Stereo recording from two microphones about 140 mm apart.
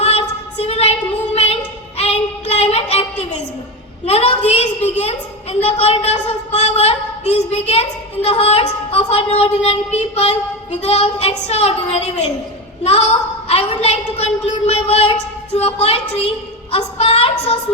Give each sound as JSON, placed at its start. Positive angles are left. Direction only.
{"t": 0.0, "sound": "female singing", "side_deg": 50}
{"t": 1.3, "sound": "a sound", "side_deg": 50}
{"t": 4.0, "sound": "a woman's voice", "side_deg": 45}